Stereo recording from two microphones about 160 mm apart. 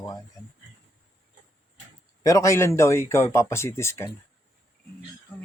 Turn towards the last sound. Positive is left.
turn(degrees=15)  # may be behind; listen again after turning